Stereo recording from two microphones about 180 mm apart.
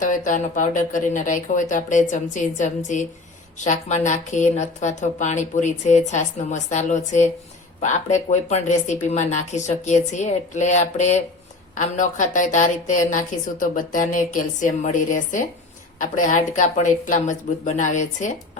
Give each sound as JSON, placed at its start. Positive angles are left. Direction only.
{"t": 0.0, "sound": "a woman's voice", "side_deg": 45}